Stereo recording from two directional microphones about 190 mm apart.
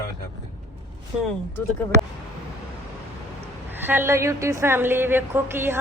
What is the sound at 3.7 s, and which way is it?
A woman's voice, 10° right (ahead or behind).